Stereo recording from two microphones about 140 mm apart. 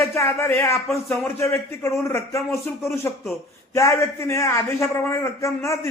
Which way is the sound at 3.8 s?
20° left (ahead or behind).